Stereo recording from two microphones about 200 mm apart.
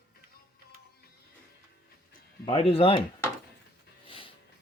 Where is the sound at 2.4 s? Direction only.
30° left (ahead or behind).